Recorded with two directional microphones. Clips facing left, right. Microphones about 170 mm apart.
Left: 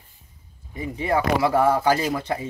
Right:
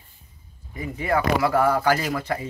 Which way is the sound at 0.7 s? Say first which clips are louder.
Left 1 dB; 25° left (ahead or behind).